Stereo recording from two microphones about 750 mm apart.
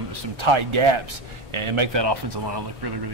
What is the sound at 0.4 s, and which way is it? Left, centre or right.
Speech, right.